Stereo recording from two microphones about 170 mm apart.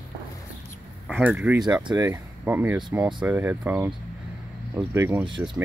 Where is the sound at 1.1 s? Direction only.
10° right (ahead or behind).